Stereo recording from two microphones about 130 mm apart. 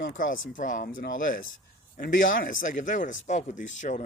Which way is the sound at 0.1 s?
90° left.